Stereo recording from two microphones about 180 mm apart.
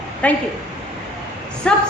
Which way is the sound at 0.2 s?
5° left (ahead or behind).